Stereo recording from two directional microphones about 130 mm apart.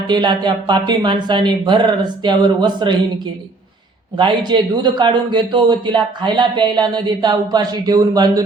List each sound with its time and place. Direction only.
0.1 s speech: 35° right (ahead or behind)
4.2 s speech: 35° right (ahead or behind)